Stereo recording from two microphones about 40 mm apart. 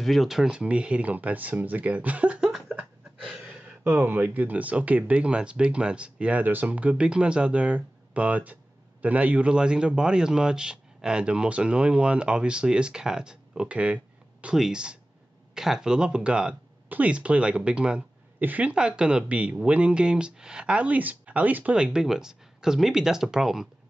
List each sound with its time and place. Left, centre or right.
0.0 s speech: centre
0.4 s speech: right
1.1 s speech: right
3.6 s a sound: right
4.1 s speech: right
6.3 s speech: right
14.5 s speech: centre
20.7 s speech: right
21.7 s speech: right